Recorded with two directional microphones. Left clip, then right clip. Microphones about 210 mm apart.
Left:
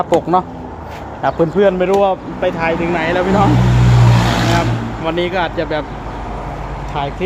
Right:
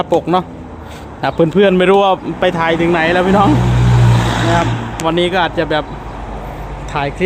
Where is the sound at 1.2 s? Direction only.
35° right (ahead or behind).